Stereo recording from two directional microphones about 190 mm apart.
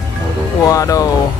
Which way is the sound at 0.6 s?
20° left (ahead or behind).